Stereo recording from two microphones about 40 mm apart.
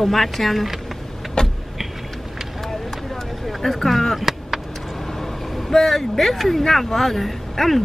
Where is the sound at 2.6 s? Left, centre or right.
Centre.